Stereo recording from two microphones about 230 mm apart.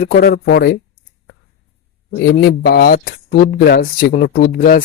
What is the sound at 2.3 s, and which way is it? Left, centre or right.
Speech, left.